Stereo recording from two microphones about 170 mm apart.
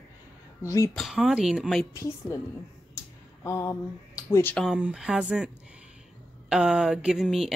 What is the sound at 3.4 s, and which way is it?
Speech, 15° left (ahead or behind).